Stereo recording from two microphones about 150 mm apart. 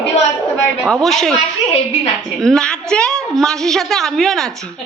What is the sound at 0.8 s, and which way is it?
Speech, centre (ahead or behind).